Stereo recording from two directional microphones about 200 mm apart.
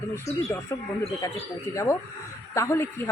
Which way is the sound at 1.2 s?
15° left (ahead or behind).